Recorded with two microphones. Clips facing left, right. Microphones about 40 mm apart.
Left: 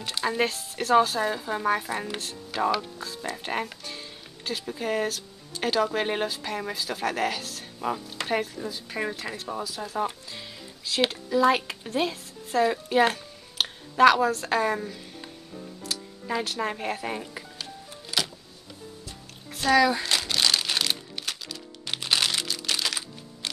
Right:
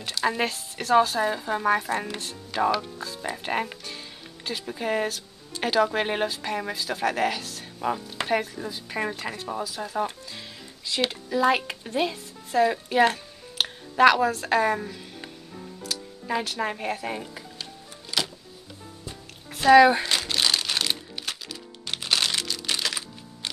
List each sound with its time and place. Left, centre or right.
0.2 s a woman's voice: centre
15.1 s music: centre
16.3 s speech: centre
19.0 s music: centre